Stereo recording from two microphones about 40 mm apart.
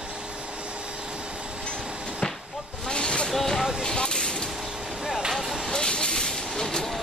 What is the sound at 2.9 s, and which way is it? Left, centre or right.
Vehicle, left.